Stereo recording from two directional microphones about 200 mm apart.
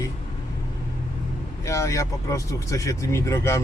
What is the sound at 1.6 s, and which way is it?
Speech, 15° left (ahead or behind).